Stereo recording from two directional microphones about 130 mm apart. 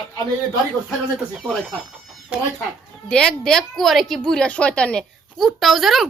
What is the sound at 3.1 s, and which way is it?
A woman's voice, 5° left (ahead or behind).